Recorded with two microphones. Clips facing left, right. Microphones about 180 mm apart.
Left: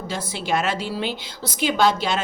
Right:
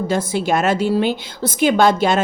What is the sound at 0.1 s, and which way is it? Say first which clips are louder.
A woman's voice: right 5 dB; 50° right (ahead or behind).